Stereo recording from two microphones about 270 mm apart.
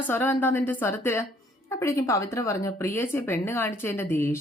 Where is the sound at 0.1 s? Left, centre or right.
Centre.